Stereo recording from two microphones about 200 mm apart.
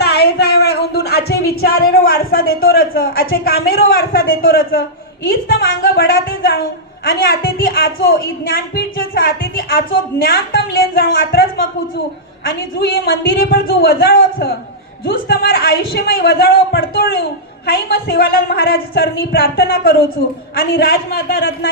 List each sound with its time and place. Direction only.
0.0 s a woman's voice: 55° left (ahead or behind)